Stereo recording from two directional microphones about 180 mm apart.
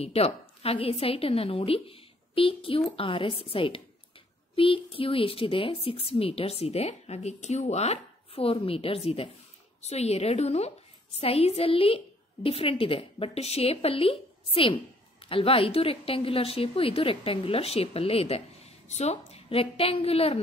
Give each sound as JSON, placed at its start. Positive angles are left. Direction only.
{"t": 0.0, "sound": "a woman's voice", "side_deg": 35}